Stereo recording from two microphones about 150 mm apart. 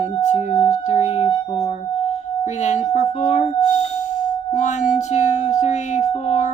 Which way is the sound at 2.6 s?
50° left (ahead or behind).